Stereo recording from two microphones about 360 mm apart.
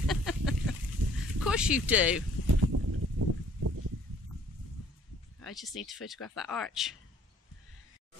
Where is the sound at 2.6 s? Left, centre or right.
Right.